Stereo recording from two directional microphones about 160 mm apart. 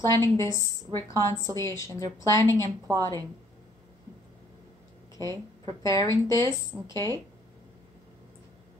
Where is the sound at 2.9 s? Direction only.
20° right (ahead or behind).